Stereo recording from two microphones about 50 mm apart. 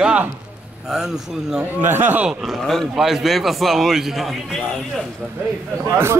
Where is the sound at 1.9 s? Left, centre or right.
Right.